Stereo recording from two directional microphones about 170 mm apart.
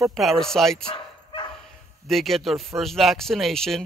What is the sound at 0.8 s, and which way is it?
Bow-wow, 30° left (ahead or behind).